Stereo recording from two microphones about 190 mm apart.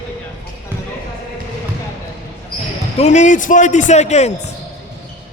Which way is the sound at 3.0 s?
40° left (ahead or behind).